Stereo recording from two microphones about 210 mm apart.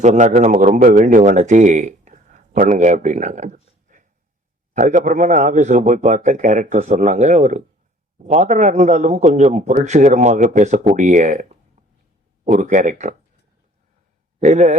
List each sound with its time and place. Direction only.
0.0 s a man's voice: 35° right (ahead or behind)
3.9 s a sound: 35° right (ahead or behind)
4.7 s a man's voice: 35° right (ahead or behind)
14.3 s a man's voice: 35° right (ahead or behind)